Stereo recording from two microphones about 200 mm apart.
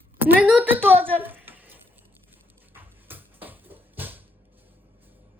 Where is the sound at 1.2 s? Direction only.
10° right (ahead or behind).